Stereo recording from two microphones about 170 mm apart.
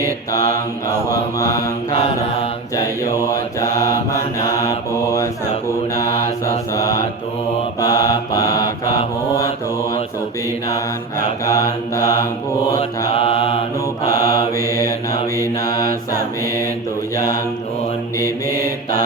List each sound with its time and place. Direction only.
1.1 s mantra: 20° left (ahead or behind)
2.7 s mantra: 20° left (ahead or behind)
7.8 s mantra: 20° left (ahead or behind)
11.4 s mantra: 20° left (ahead or behind)
13.1 s mantra: 35° left (ahead or behind)
14.1 s mantra: 60° right (ahead or behind)
15.6 s mantra: 20° left (ahead or behind)
17.2 s mantra: 20° left (ahead or behind)